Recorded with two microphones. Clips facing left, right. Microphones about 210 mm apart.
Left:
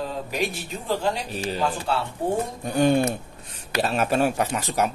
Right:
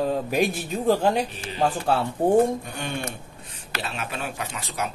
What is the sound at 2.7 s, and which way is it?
Speech, 40° left (ahead or behind).